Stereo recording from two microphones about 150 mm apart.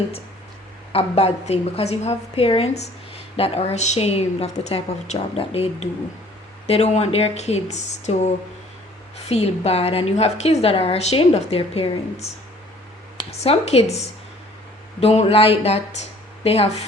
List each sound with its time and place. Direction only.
0.9 s a woman's voice: 45° left (ahead or behind)
13.1 s a woman's voice: 45° left (ahead or behind)
15.0 s a woman's voice: 40° left (ahead or behind)